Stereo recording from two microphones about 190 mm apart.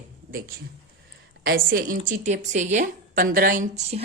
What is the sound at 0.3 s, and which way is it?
Speech, 50° right (ahead or behind).